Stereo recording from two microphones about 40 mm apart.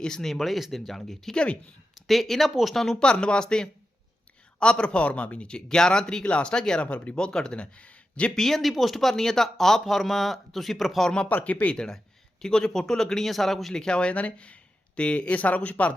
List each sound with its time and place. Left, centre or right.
0.0 s speech: centre
0.3 s speech: centre
2.8 s speech: centre
5.6 s speech: centre
6.2 s speech: left
6.5 s speech: centre
8.4 s speech: centre
11.3 s speech: left
11.7 s speech: left; by 13.7 s centre
13.7 s speech: left
14.1 s speech: left
15.3 s speech: left